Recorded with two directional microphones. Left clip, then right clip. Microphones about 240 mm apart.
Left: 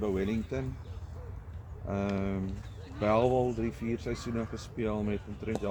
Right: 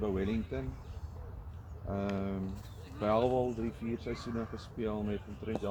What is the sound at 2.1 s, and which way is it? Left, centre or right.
Speech, left.